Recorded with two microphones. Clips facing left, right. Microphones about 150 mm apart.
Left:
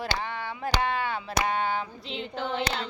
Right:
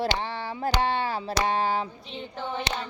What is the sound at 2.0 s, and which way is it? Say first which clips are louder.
Female singing: left 2 dB; 90° left.